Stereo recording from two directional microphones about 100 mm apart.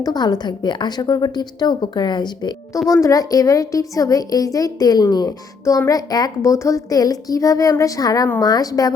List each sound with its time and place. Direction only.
0.0 s a woman's voice: 45° left (ahead or behind)
2.9 s a woman's voice: 35° left (ahead or behind)